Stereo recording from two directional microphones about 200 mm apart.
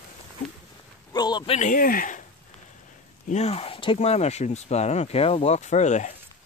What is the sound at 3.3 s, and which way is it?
Speech, 30° left (ahead or behind).